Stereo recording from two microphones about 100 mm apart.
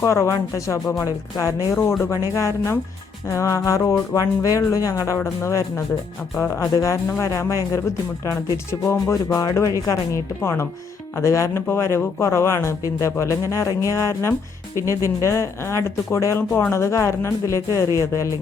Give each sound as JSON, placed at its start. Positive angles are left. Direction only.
{"t": 0.0, "sound": "speech", "side_deg": 30}
{"t": 2.3, "sound": "music", "side_deg": 30}
{"t": 8.7, "sound": "speech", "side_deg": 25}